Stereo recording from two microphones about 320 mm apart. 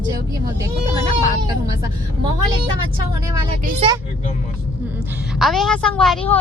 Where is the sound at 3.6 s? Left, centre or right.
Right.